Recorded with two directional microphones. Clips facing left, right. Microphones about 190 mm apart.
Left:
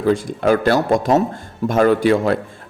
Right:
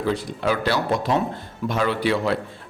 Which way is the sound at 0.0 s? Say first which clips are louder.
Left 7 dB; 50° left (ahead or behind).